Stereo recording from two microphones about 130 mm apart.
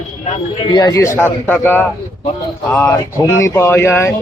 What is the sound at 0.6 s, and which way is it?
A man's voice, 35° left (ahead or behind).